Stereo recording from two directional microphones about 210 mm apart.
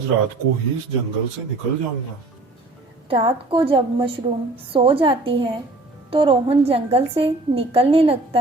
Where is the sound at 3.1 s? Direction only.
25° right (ahead or behind).